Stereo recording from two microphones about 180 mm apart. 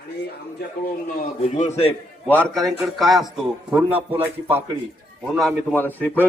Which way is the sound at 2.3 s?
10° left (ahead or behind).